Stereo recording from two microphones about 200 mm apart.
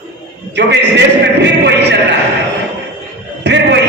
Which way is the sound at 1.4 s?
60° right (ahead or behind).